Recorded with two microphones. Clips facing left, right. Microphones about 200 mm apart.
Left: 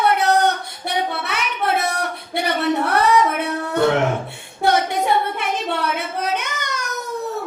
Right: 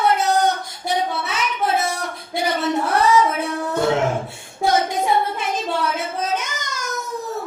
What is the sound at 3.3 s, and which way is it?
Music, 65° left (ahead or behind).